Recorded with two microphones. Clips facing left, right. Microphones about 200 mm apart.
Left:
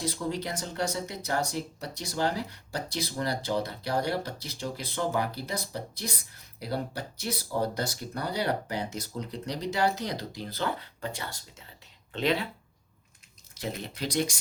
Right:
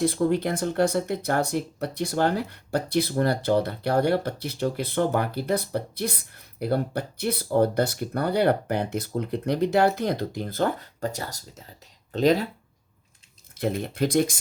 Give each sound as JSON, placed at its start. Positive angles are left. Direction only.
{"t": 0.0, "sound": "speech", "side_deg": -55}
{"t": 13.5, "sound": "speech", "side_deg": -55}